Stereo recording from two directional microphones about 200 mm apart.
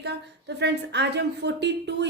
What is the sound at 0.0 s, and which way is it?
A woman's voice, 60° right (ahead or behind).